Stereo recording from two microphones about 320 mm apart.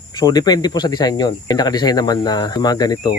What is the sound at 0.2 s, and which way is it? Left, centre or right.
Speech, centre.